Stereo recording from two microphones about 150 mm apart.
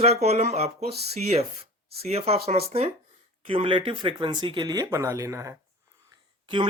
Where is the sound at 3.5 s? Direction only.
35° right (ahead or behind).